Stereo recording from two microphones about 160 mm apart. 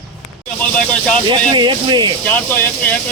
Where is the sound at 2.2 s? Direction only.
10° left (ahead or behind).